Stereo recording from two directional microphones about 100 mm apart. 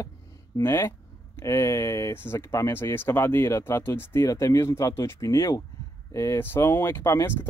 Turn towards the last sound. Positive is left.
turn(degrees=25)  # may be behind; listen again after turning